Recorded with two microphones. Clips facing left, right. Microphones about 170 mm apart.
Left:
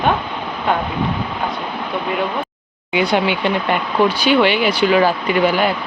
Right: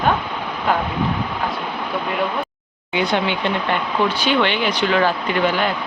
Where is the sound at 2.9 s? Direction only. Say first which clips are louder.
Left 3 dB; 10° left (ahead or behind).